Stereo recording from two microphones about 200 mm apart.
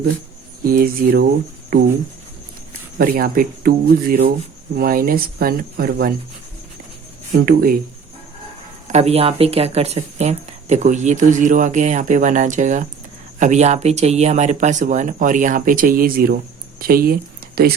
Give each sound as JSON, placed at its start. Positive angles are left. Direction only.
{"t": 0.6, "sound": "speech", "side_deg": -45}
{"t": 3.0, "sound": "speech", "side_deg": -45}
{"t": 7.4, "sound": "speech", "side_deg": -45}
{"t": 8.9, "sound": "speech", "side_deg": -30}